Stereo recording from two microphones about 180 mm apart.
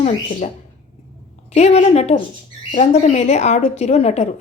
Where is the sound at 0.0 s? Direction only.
40° left (ahead or behind).